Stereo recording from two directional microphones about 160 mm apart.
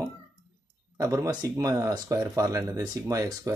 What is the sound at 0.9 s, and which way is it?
Speech, 20° right (ahead or behind).